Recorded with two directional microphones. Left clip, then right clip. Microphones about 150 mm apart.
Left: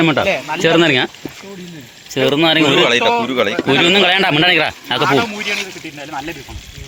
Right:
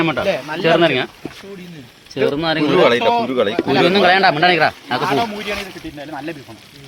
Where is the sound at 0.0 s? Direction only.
70° left (ahead or behind).